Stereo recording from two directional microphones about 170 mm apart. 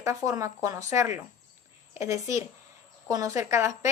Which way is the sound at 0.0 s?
20° right (ahead or behind).